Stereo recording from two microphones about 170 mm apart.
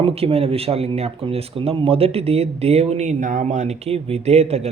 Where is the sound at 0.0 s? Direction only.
35° right (ahead or behind).